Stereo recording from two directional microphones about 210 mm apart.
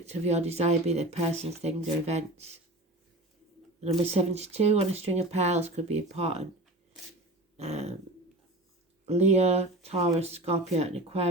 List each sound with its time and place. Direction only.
0.0 s speech: 30° right (ahead or behind)
3.8 s speech: 30° right (ahead or behind)
7.5 s dog: 30° right (ahead or behind)
9.0 s speech: 30° right (ahead or behind)